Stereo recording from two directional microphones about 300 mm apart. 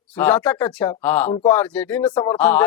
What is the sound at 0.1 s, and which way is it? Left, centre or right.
Speech, centre.